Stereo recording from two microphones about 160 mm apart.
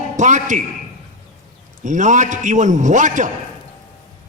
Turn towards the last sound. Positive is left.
turn(degrees=-50)  # may be behind; listen again after turning